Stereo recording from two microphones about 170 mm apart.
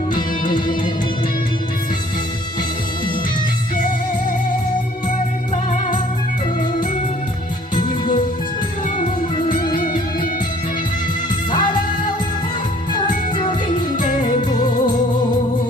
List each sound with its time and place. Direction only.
7.8 s music: 30° left (ahead or behind)
11.5 s music: 25° left (ahead or behind)
14.2 s music: 30° left (ahead or behind)